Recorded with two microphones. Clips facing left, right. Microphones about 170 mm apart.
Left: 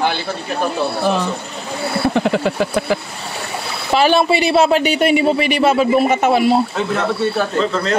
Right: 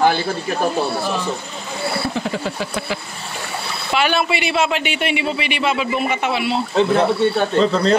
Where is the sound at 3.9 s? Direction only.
35° left (ahead or behind).